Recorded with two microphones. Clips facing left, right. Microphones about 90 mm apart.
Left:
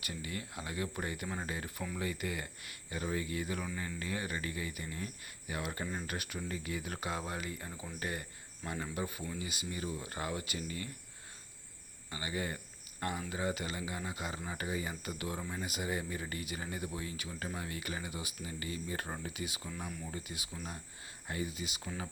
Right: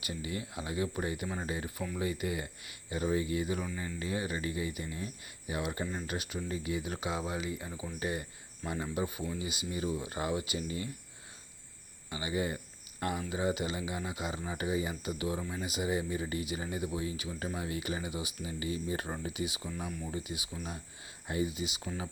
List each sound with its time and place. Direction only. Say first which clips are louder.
0.0 s speech: right 4 dB; 10° right (ahead or behind)
12.1 s speech: right 4 dB; 15° right (ahead or behind)